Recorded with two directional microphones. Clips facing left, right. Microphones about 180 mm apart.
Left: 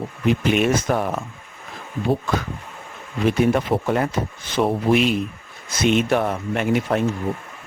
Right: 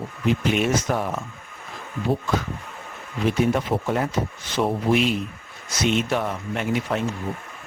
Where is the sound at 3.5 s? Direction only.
65° left (ahead or behind).